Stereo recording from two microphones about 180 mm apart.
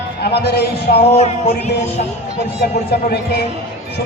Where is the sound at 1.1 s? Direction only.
40° left (ahead or behind).